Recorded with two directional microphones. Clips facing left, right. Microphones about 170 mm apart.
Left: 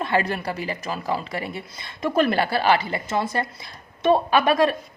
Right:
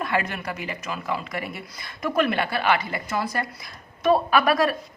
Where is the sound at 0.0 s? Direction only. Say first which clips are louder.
Left 3 dB; 30° left (ahead or behind).